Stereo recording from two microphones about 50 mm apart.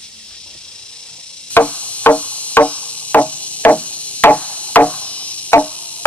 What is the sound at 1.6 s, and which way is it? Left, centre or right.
Music, left.